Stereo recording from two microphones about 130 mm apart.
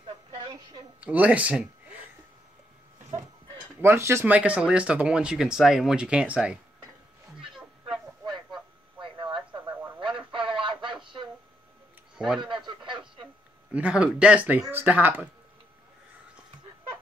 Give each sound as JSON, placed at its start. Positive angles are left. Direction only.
{"t": 1.0, "sound": "speech", "side_deg": -10}
{"t": 3.8, "sound": "speech", "side_deg": -20}
{"t": 9.0, "sound": "a sound", "side_deg": -40}
{"t": 9.7, "sound": "radio", "side_deg": -15}
{"t": 9.9, "sound": "radio", "side_deg": -40}
{"t": 12.4, "sound": "radio", "side_deg": -40}
{"t": 13.7, "sound": "speech", "side_deg": -10}